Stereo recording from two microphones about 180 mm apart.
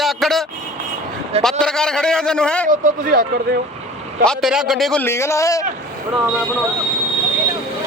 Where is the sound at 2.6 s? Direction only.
55° right (ahead or behind).